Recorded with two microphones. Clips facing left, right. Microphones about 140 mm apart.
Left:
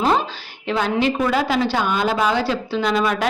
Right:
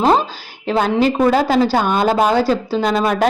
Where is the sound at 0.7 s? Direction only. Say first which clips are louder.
Right 4 dB; 40° right (ahead or behind).